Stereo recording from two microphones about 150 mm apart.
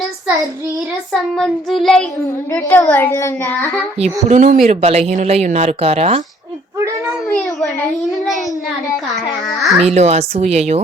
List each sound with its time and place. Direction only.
1.1 s child singing: centre (ahead or behind)
2.6 s a child's voice: 10° left (ahead or behind)
4.3 s speech: 55° right (ahead or behind)
4.8 s speech: 45° right (ahead or behind)
7.3 s a child's voice: 5° left (ahead or behind)
9.6 s child singing: centre (ahead or behind)
9.8 s speech: 45° right (ahead or behind)